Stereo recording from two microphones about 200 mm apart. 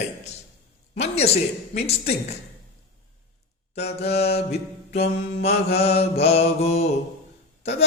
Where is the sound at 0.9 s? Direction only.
30° left (ahead or behind).